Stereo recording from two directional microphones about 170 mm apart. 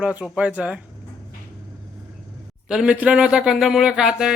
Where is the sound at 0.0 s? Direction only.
10° right (ahead or behind).